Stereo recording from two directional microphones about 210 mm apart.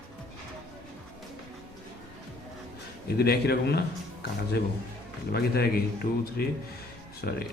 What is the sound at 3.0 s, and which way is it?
Speech, 50° left (ahead or behind).